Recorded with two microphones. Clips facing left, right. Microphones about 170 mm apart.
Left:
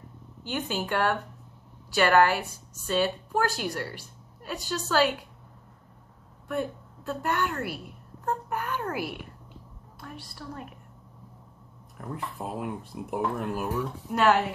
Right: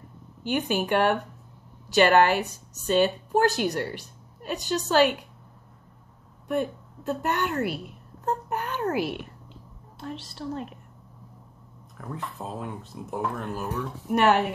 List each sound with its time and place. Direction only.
0.4 s a woman's voice: 15° right (ahead or behind)
6.4 s a woman's voice: 20° right (ahead or behind)
10.2 s a woman's voice: 25° right (ahead or behind)
12.0 s speech: 5° left (ahead or behind)
14.0 s a woman's voice: 20° right (ahead or behind)